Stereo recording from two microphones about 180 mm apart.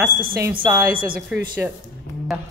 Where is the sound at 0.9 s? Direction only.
50° right (ahead or behind).